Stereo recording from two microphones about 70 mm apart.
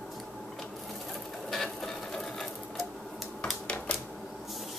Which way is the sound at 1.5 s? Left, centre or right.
Centre.